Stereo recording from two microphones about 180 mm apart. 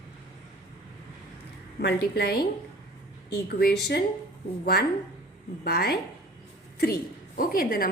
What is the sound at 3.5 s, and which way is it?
Speech, 60° left (ahead or behind).